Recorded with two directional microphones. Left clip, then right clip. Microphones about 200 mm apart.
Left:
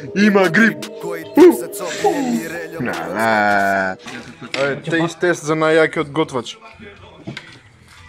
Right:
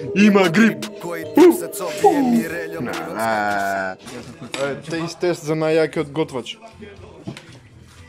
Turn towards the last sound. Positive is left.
turn(degrees=-5)  # may be behind; listen again after turning